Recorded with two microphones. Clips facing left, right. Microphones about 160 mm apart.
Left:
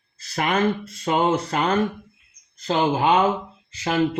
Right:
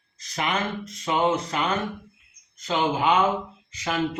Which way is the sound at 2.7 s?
35° left (ahead or behind).